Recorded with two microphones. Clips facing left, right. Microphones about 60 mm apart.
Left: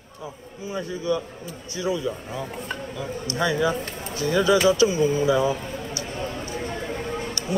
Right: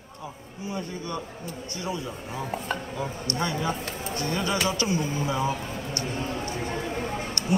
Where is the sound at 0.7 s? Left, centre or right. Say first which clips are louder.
Left 8 dB; right.